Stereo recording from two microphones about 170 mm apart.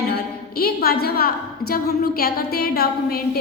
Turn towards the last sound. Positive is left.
turn(degrees=65)  # may be behind; listen again after turning